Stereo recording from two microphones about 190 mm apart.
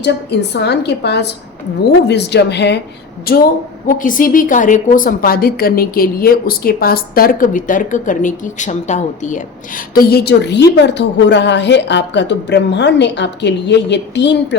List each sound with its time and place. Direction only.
0.0 s a woman's voice: 60° left (ahead or behind)
3.3 s a woman's voice: 55° left (ahead or behind)